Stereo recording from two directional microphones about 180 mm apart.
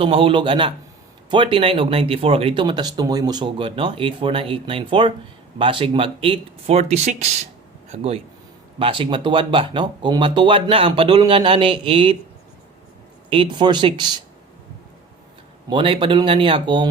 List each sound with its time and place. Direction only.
0.0 s speech: 30° right (ahead or behind)
13.3 s speech: 25° right (ahead or behind)
15.7 s speech: 30° right (ahead or behind)